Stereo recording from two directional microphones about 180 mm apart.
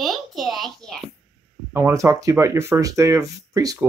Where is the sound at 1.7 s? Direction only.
15° right (ahead or behind).